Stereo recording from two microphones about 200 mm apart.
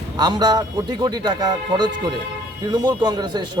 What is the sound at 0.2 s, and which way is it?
Speech, 20° right (ahead or behind).